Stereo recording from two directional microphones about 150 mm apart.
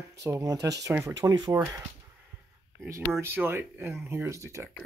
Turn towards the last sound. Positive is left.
turn(degrees=-20)  # may be behind; listen again after turning